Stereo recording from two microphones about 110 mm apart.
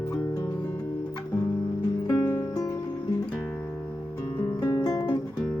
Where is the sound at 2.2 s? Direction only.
30° left (ahead or behind).